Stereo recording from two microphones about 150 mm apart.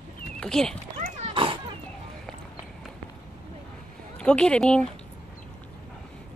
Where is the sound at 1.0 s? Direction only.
40° right (ahead or behind).